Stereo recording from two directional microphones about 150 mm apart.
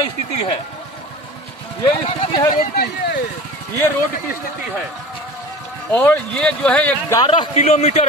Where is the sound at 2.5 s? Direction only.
75° left (ahead or behind).